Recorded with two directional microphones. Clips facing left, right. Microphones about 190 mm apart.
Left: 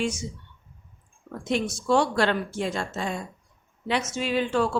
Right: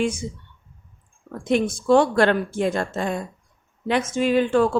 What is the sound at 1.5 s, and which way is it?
Speech, 55° right (ahead or behind).